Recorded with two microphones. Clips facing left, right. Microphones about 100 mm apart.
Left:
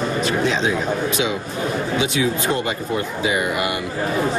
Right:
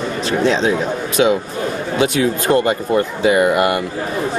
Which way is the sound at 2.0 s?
50° right (ahead or behind).